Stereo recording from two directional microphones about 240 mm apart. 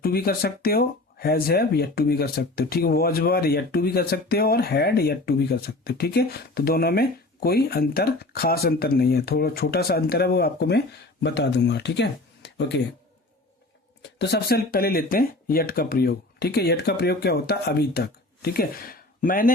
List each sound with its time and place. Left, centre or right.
0.0 s speech: left
14.2 s speech: left